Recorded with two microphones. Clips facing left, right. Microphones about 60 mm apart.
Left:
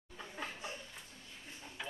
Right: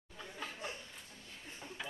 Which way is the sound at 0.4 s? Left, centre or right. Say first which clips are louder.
Even; left.